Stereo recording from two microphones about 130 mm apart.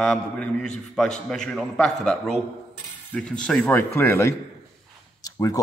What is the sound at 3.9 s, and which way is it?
A man's voice, 20° left (ahead or behind).